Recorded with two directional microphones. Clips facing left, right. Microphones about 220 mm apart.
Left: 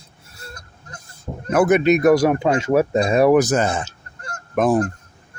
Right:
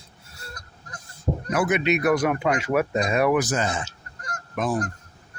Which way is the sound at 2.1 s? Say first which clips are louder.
Left 6 dB; 30° left (ahead or behind).